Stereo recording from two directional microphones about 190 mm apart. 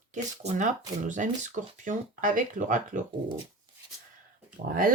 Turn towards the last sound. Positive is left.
turn(degrees=-50)  # may be behind; listen again after turning